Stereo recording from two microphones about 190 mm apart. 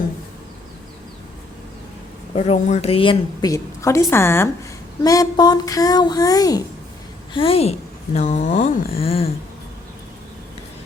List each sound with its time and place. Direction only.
2.3 s a woman's voice: 35° left (ahead or behind)
3.5 s a woman's voice: 15° left (ahead or behind)
7.3 s a woman's voice: 30° left (ahead or behind)